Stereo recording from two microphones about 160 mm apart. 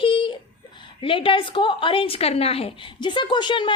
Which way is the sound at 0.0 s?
35° left (ahead or behind).